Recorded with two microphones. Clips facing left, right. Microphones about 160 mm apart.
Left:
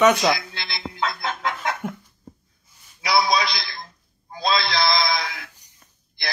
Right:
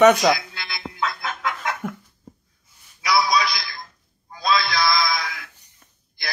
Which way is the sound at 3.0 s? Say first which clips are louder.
Even; 35° left (ahead or behind).